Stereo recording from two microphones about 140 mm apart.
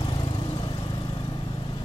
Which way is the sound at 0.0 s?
35° left (ahead or behind).